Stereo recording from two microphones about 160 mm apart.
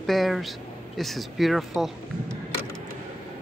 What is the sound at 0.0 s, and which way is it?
Speech, centre (ahead or behind).